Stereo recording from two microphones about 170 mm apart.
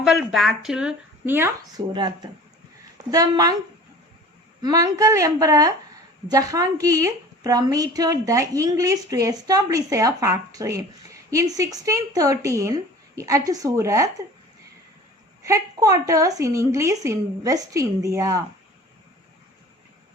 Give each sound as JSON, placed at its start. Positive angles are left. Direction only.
{"t": 0.0, "sound": "speech", "side_deg": -5}
{"t": 1.7, "sound": "a woman's voice", "side_deg": -25}
{"t": 4.6, "sound": "a woman's voice", "side_deg": -20}
{"t": 15.4, "sound": "a woman's voice", "side_deg": -20}